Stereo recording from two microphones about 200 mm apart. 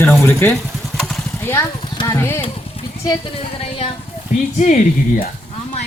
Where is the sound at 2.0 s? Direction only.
15° left (ahead or behind).